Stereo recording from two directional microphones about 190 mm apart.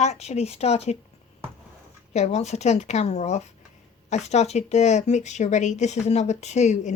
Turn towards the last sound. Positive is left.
turn(degrees=35)  # may be behind; listen again after turning